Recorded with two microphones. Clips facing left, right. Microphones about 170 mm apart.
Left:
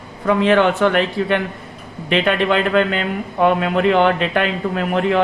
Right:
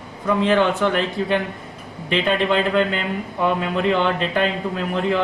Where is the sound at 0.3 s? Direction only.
70° left (ahead or behind).